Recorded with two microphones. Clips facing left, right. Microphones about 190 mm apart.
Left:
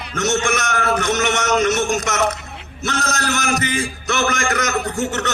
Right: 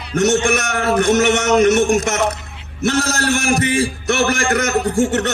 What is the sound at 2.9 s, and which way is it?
A man's voice, 35° right (ahead or behind).